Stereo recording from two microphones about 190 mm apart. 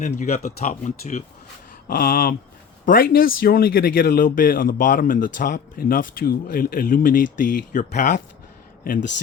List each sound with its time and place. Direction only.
0.0 s speech: 40° left (ahead or behind)
1.9 s speech: 50° left (ahead or behind)